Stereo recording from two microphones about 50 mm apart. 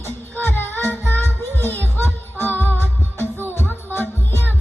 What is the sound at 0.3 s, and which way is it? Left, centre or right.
Music, left.